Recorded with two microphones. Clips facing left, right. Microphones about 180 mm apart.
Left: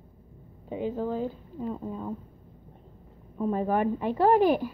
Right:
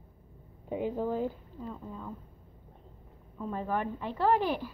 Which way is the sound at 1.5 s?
20° left (ahead or behind).